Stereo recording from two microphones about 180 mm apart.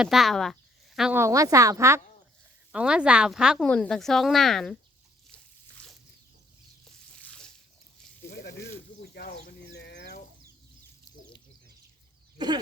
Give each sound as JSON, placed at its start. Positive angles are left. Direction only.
{"t": 0.0, "sound": "speech", "side_deg": 0}
{"t": 1.2, "sound": "speech", "side_deg": -20}
{"t": 2.7, "sound": "speech", "side_deg": -5}
{"t": 5.8, "sound": "a sound", "side_deg": 5}
{"t": 6.8, "sound": "zipper", "side_deg": 5}
{"t": 8.3, "sound": "a sound", "side_deg": 70}
{"t": 9.1, "sound": "chicken", "side_deg": 65}
{"t": 12.4, "sound": "speech", "side_deg": -25}